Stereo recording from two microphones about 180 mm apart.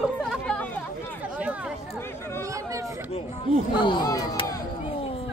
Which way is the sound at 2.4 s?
15° right (ahead or behind).